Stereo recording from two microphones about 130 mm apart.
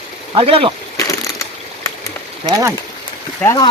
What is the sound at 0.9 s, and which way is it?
Crushing, 25° left (ahead or behind).